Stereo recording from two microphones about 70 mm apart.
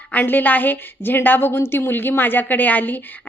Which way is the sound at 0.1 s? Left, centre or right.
Left.